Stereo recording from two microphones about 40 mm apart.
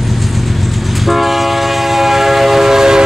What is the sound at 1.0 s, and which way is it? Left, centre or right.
Train, centre.